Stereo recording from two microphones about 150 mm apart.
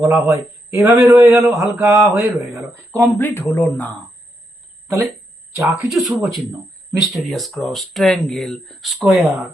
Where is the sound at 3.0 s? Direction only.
10° left (ahead or behind).